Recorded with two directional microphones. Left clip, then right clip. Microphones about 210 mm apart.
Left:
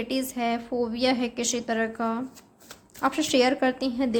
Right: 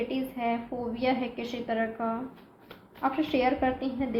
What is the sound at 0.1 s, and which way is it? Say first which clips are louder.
A woman's voice: left 3 dB; 50° left (ahead or behind).